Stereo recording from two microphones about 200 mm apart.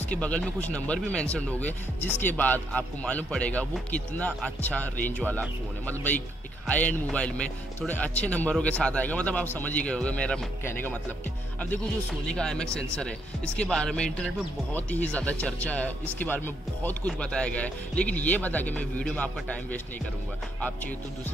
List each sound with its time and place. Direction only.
0.1 s speech: 5° left (ahead or behind)